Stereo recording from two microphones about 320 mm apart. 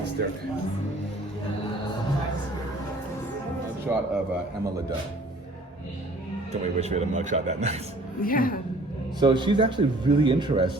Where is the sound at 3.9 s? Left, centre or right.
Centre.